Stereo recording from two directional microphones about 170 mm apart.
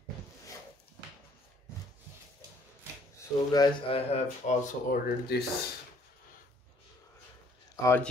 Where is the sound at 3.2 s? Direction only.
25° left (ahead or behind).